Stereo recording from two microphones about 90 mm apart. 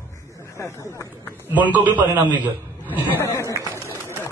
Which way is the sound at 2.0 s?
20° right (ahead or behind).